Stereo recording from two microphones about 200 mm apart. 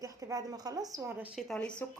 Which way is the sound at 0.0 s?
15° right (ahead or behind).